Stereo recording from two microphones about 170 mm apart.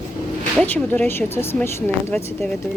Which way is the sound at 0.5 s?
10° left (ahead or behind).